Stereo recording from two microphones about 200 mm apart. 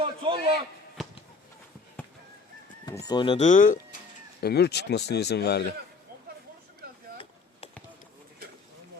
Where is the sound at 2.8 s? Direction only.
20° left (ahead or behind); by 3.8 s 40° left (ahead or behind).